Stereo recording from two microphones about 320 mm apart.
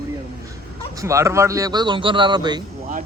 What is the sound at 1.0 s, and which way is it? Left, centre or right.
Speech, centre.